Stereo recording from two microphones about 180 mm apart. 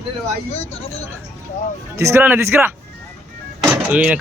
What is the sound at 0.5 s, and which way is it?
Speech, 35° left (ahead or behind).